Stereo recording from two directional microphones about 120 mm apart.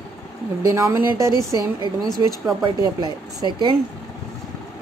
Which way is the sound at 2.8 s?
30° right (ahead or behind).